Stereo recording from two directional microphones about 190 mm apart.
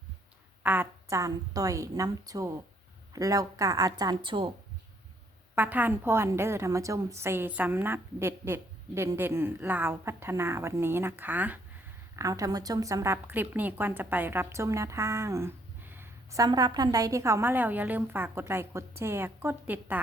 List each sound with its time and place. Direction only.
0.6 s a woman's voice: 10° right (ahead or behind); by 4.5 s 25° right (ahead or behind)
5.5 s a woman's voice: 10° right (ahead or behind)